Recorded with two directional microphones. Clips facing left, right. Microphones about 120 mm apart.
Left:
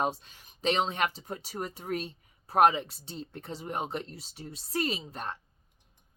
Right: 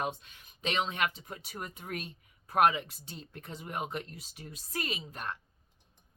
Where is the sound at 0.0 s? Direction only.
35° left (ahead or behind).